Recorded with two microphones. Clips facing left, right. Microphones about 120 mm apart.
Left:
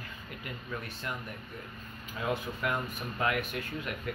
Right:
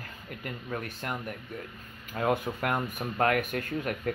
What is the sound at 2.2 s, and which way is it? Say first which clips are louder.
Speech: right 5 dB; 55° right (ahead or behind).